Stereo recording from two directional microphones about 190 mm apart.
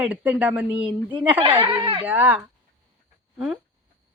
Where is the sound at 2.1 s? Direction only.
10° right (ahead or behind).